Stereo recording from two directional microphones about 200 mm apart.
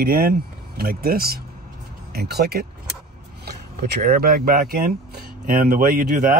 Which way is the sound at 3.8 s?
50° right (ahead or behind).